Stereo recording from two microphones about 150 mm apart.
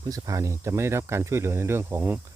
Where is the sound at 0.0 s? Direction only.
25° right (ahead or behind).